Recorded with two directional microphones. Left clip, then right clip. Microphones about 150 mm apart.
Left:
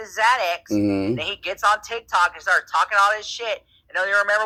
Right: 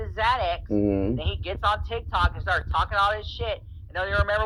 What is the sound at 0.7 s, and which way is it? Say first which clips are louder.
Speech: left 1 dB; 15° right (ahead or behind).